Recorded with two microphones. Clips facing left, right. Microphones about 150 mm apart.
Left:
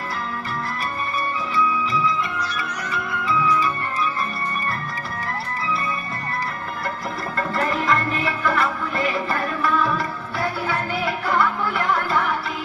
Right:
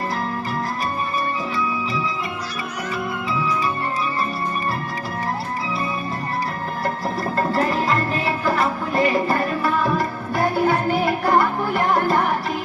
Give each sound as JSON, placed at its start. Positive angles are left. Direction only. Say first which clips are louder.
{"t": 2.9, "sound": "music", "louder": "left 1 dB", "side_deg": -35}
{"t": 7.3, "sound": "music", "louder": "right 3 dB", "side_deg": -35}